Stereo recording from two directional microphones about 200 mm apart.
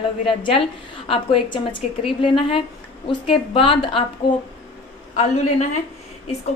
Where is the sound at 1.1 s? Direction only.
25° left (ahead or behind).